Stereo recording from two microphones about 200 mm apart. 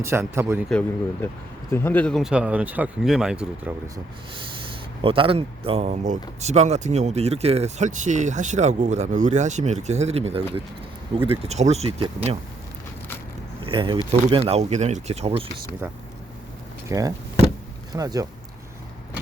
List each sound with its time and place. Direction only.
0.0 s a man's voice: 10° right (ahead or behind)
0.7 s speech: 5° left (ahead or behind)
5.0 s speech: 25° right (ahead or behind)
13.6 s speech: 25° right (ahead or behind)
16.9 s a man's voice: 15° right (ahead or behind)